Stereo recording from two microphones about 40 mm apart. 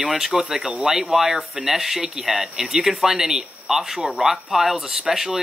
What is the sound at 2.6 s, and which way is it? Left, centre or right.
Speech, centre.